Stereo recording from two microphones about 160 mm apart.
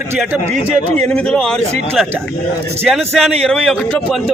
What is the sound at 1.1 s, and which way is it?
A man's voice, 5° left (ahead or behind).